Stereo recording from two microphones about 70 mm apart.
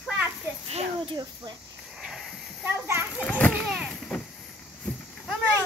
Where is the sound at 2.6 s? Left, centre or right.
Right.